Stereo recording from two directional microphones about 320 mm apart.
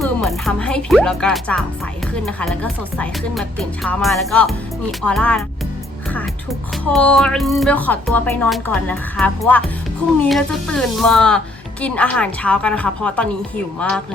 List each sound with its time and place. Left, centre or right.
0.0 s speech: centre